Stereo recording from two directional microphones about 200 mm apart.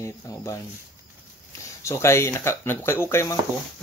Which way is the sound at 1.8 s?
15° left (ahead or behind).